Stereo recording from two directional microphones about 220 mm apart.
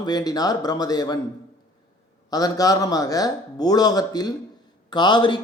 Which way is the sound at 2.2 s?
15° left (ahead or behind).